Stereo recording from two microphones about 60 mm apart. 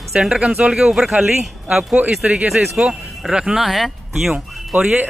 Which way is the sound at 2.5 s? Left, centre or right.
Centre.